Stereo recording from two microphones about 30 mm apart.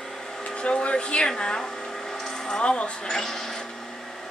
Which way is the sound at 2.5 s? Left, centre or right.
Left.